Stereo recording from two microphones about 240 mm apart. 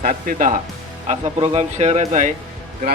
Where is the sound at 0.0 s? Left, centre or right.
Right.